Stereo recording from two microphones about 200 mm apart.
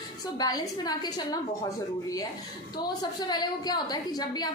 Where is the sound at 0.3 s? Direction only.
20° left (ahead or behind).